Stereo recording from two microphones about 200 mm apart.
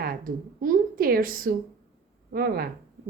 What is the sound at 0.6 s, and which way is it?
A woman's voice, 45° right (ahead or behind).